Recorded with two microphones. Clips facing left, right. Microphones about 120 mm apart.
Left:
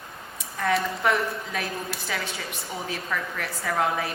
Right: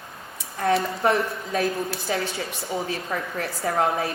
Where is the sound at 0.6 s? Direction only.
30° right (ahead or behind).